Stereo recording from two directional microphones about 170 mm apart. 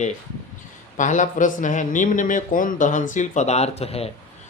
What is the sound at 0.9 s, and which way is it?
Speech, 45° left (ahead or behind).